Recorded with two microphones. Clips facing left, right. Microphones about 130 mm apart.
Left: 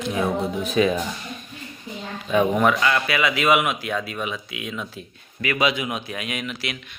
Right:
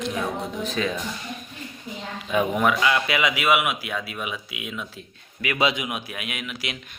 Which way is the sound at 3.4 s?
5° right (ahead or behind).